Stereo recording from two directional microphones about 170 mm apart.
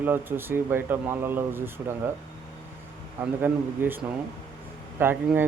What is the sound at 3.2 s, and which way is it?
A man's voice, 10° right (ahead or behind).